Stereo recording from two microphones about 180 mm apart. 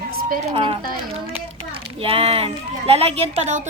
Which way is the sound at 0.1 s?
55° right (ahead or behind).